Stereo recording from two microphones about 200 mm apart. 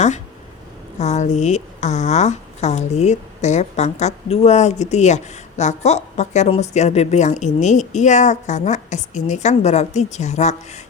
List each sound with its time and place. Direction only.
0.9 s a woman's voice: 35° left (ahead or behind)